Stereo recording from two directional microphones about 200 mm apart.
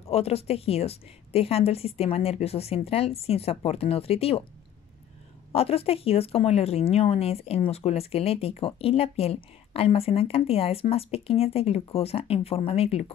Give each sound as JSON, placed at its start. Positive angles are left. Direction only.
{"t": 0.1, "sound": "a woman's voice", "side_deg": 30}
{"t": 5.5, "sound": "speech", "side_deg": 30}